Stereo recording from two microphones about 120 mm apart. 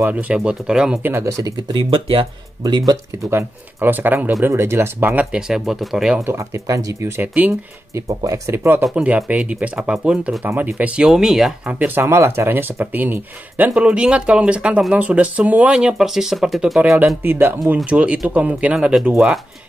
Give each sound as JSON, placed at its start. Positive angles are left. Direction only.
{"t": 0.0, "sound": "speech", "side_deg": -10}
{"t": 1.0, "sound": "speech", "side_deg": -25}
{"t": 1.7, "sound": "speech", "side_deg": -45}
{"t": 2.6, "sound": "speech", "side_deg": -35}
{"t": 3.3, "sound": "speech", "side_deg": -20}
{"t": 6.2, "sound": "speech", "side_deg": -25}
{"t": 7.9, "sound": "speech", "side_deg": -25}
{"t": 8.8, "sound": "speech", "side_deg": -10}
{"t": 17.2, "sound": "speech", "side_deg": -15}